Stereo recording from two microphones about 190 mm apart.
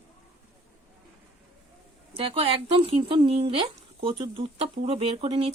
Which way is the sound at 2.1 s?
30° right (ahead or behind).